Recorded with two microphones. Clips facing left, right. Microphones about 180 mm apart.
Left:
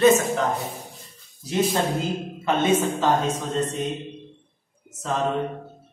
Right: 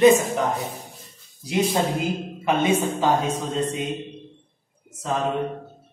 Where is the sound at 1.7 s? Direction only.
10° right (ahead or behind).